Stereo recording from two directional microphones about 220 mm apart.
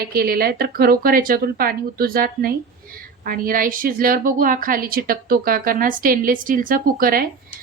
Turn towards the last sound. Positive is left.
turn(degrees=-40)  # may be behind; listen again after turning